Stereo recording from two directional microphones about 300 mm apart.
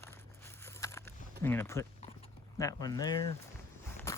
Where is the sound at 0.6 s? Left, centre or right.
Centre.